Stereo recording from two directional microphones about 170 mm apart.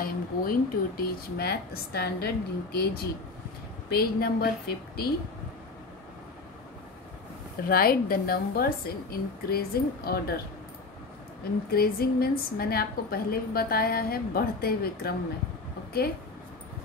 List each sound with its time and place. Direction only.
0.0 s a woman's voice: 60° left (ahead or behind)
7.6 s a woman's voice: 60° left (ahead or behind)
11.7 s a woman's voice: 65° left (ahead or behind)